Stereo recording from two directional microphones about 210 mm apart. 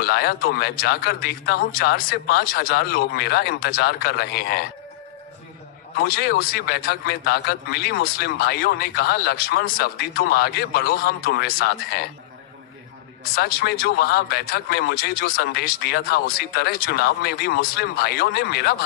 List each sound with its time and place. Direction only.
0.0 s a man's voice: 50° left (ahead or behind)
5.9 s a man's voice: 45° left (ahead or behind)
13.3 s a man's voice: 50° left (ahead or behind)